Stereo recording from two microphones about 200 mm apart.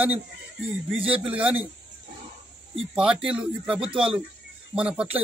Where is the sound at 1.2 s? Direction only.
5° right (ahead or behind).